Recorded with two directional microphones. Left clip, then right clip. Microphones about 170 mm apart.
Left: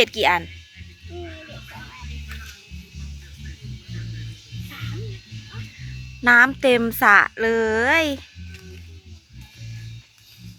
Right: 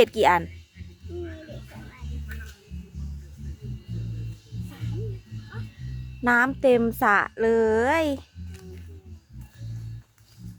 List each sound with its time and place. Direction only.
0.0 s speech: 25° right (ahead or behind)
6.2 s speech: 10° right (ahead or behind)